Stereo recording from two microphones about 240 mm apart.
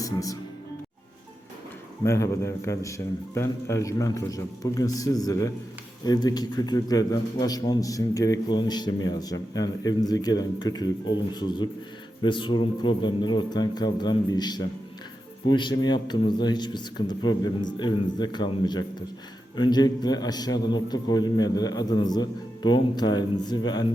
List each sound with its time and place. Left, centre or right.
0.0 s speech: centre
2.0 s a man's voice: centre